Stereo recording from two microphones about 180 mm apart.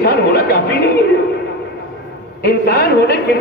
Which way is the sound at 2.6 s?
65° left (ahead or behind).